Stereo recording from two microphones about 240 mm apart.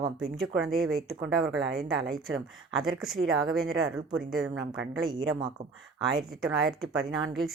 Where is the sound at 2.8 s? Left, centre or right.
Centre.